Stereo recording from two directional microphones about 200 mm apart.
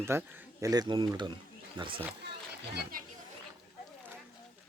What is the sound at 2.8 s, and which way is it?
Speech, 45° right (ahead or behind).